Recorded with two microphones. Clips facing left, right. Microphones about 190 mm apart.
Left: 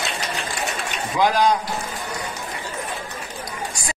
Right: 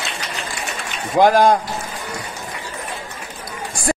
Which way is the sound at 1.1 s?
50° right (ahead or behind).